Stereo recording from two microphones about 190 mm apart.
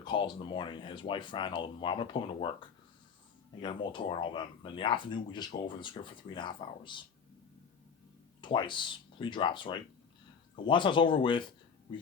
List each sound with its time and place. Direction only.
0.0 s speech: 25° left (ahead or behind)
8.4 s speech: 25° left (ahead or behind)